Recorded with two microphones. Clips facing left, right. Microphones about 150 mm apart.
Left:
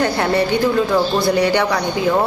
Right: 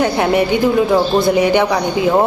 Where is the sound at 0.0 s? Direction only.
15° right (ahead or behind).